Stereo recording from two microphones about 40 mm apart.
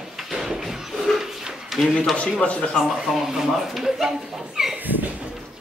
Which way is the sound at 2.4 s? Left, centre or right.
Left.